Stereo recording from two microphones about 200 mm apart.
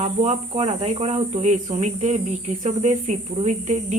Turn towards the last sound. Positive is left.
turn(degrees=-35)  # may be behind; listen again after turning